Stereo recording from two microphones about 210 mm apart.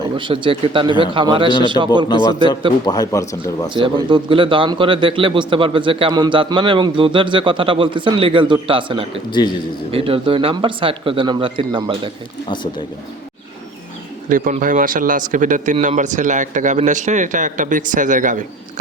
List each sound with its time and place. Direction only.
0.0 s speech: 25° right (ahead or behind)
2.0 s speech: 20° left (ahead or behind)
4.1 s speech: 25° right (ahead or behind)
9.4 s speech: 20° left (ahead or behind)
9.9 s speech: 25° right (ahead or behind)
14.3 s a man's voice: 40° right (ahead or behind)